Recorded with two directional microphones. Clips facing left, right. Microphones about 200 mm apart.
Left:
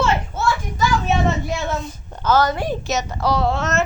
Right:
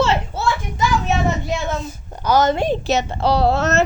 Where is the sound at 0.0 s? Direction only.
25° right (ahead or behind).